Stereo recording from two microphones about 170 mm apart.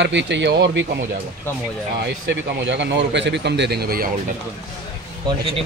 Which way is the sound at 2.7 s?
90° right.